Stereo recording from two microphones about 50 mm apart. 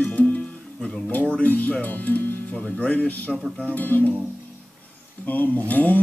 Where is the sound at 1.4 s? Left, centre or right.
Left.